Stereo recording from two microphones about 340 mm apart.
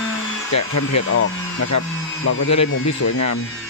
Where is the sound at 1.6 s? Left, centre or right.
Left.